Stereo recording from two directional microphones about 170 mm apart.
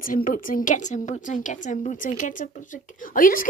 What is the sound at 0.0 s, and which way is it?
A woman's voice, 55° left (ahead or behind).